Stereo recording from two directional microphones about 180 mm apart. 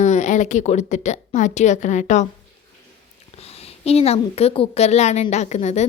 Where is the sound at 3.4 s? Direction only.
35° left (ahead or behind).